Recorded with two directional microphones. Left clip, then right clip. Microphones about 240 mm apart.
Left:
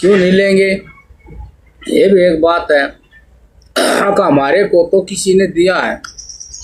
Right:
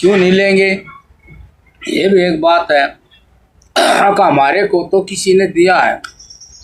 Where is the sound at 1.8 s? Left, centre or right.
Right.